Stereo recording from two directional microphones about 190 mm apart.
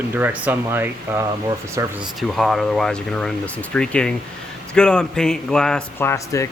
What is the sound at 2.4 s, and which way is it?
Speech, centre (ahead or behind).